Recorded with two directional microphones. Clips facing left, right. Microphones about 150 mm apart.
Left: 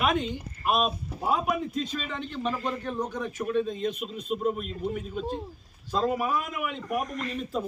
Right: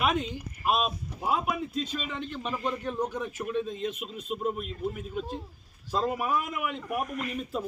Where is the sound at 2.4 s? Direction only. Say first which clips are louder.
Left 2 dB; 20° right (ahead or behind).